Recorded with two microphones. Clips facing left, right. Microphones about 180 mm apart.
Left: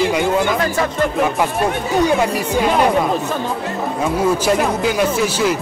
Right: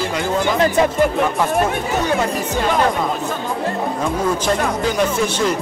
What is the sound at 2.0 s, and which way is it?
Speech, 10° left (ahead or behind).